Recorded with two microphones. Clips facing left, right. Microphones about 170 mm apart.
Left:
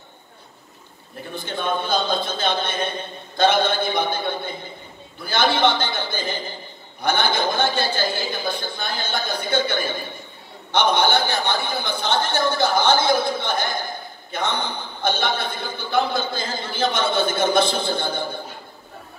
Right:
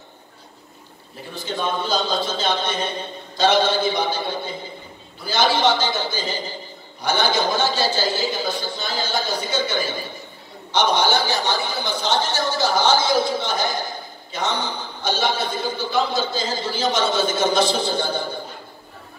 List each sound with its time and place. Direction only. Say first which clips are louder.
1.3 s a man's voice: even; 55° left (ahead or behind)